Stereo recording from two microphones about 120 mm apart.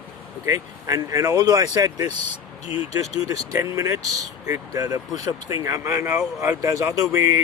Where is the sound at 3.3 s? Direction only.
30° right (ahead or behind).